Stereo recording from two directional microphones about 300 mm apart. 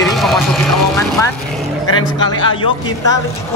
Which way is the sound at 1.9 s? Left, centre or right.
Centre.